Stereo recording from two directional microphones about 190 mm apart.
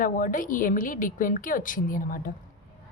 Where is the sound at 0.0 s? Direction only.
45° left (ahead or behind).